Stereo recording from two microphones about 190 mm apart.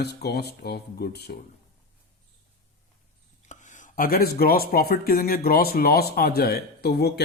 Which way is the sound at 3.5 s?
40° left (ahead or behind).